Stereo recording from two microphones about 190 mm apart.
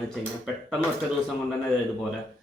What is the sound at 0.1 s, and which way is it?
Speech, centre (ahead or behind).